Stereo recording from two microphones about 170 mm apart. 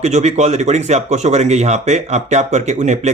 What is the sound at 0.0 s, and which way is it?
Speech, 40° right (ahead or behind).